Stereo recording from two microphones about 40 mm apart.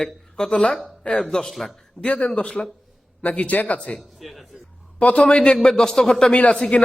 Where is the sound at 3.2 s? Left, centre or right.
Left.